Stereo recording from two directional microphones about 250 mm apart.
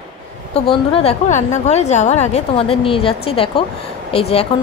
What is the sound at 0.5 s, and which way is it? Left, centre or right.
A woman's voice, left.